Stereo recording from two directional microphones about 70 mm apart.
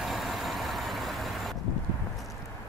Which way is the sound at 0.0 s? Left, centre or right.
Centre.